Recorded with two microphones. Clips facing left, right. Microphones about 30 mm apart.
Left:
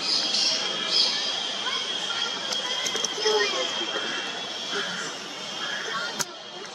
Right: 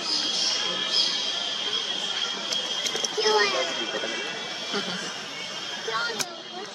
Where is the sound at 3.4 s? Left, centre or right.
Right.